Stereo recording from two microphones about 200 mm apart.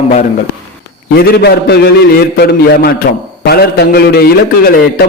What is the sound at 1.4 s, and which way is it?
A man's voice, 55° left (ahead or behind).